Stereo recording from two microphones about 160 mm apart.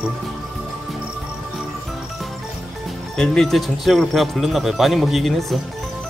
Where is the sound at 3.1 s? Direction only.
5° left (ahead or behind).